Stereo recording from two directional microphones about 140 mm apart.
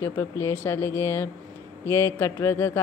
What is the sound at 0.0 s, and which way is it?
A woman's voice, 20° left (ahead or behind).